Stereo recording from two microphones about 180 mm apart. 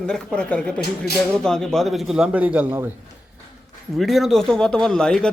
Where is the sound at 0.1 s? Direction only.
5° left (ahead or behind); by 2.9 s 10° right (ahead or behind).